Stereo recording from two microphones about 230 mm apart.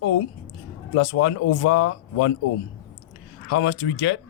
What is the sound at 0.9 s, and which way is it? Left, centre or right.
Speech, left.